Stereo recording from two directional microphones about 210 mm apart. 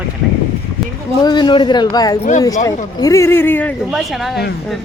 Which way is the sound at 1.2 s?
20° left (ahead or behind).